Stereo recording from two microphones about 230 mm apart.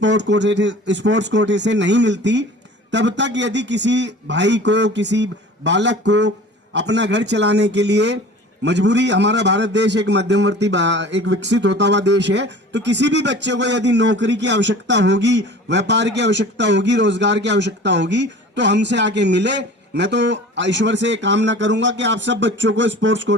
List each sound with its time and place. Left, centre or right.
0.0 s a man's voice: right